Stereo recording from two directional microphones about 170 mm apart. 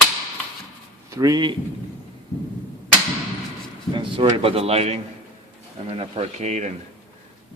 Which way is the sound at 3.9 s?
30° right (ahead or behind).